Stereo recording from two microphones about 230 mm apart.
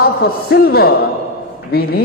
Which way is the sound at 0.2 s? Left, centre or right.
Left.